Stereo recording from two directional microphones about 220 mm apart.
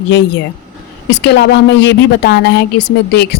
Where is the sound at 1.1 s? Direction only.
50° left (ahead or behind).